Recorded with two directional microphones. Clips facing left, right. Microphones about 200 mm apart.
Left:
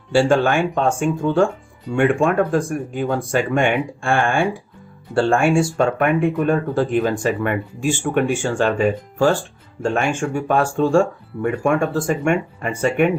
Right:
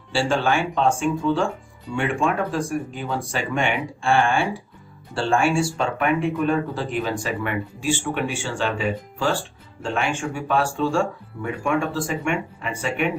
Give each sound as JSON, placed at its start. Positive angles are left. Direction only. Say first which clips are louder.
{"t": 0.1, "sound": "speech", "louder": "left 6 dB", "side_deg": 50}